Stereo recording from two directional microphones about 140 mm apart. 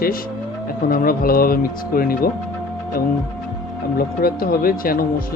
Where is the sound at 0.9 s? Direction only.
90° left.